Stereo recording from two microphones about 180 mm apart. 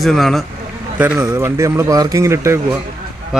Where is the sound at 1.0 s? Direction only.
10° right (ahead or behind).